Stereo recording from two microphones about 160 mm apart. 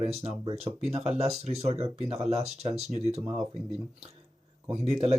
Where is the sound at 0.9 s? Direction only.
40° right (ahead or behind).